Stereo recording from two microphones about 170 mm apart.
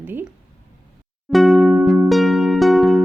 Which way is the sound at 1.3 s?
Centre (ahead or behind).